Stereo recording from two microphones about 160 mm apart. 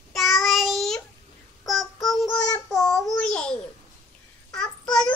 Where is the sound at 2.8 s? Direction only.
5° left (ahead or behind).